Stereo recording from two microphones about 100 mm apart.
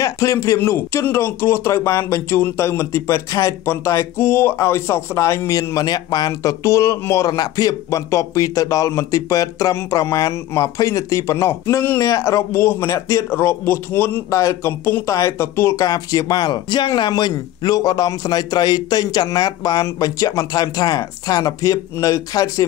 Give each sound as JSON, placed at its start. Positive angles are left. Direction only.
{"t": 0.0, "sound": "a man's voice", "side_deg": 30}
{"t": 15.7, "sound": "speech", "side_deg": 40}